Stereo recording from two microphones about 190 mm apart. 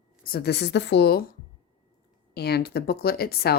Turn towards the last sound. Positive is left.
turn(degrees=55)  # may be behind; listen again after turning